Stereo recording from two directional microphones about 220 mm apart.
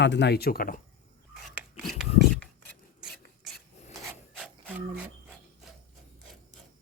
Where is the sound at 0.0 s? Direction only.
50° left (ahead or behind).